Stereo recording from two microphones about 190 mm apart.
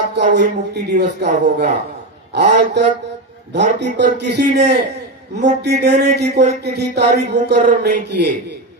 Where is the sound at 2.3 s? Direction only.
65° right (ahead or behind).